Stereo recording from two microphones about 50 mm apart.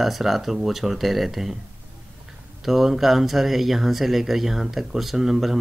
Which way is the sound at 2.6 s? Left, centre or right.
Centre.